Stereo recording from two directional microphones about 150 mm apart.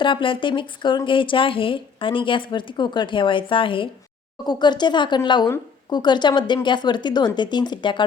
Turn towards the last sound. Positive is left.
turn(degrees=30)  # may be behind; listen again after turning